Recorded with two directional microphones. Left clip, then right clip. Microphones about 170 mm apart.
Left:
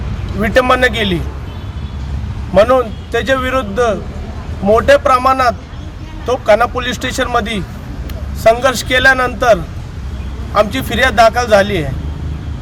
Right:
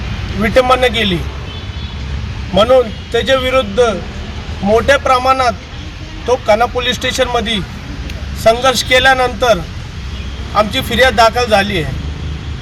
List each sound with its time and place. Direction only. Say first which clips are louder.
0.4 s speech: right 1 dB; 5° left (ahead or behind)
2.6 s a man's voice: even; 5° left (ahead or behind)
8.4 s a man's voice: right 1 dB; 5° left (ahead or behind)
10.5 s a man's voice: even; 5° left (ahead or behind)